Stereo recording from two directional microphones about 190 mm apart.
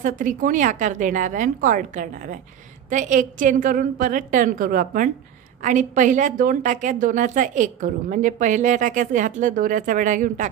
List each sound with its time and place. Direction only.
0.0 s a woman's voice: 45° right (ahead or behind)